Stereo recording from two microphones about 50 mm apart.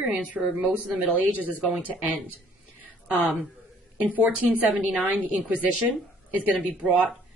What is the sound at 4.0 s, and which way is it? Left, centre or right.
Speech, right.